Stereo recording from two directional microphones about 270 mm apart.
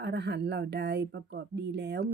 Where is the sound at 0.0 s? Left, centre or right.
Right.